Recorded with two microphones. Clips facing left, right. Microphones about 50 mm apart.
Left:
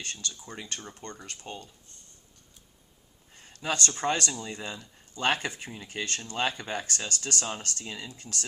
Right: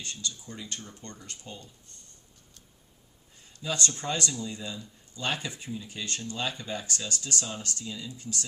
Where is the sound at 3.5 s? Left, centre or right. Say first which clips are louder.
Left 2 dB; left.